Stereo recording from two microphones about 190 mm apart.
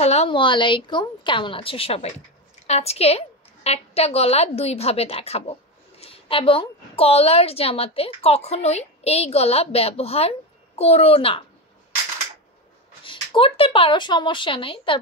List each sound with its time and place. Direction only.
0.0 s a woman's voice: 35° left (ahead or behind)
13.0 s a woman's voice: 25° left (ahead or behind)